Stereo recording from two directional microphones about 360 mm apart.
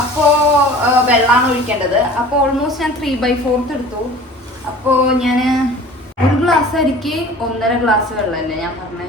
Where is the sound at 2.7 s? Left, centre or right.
Centre.